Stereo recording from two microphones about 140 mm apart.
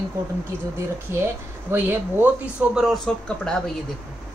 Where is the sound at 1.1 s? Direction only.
20° right (ahead or behind).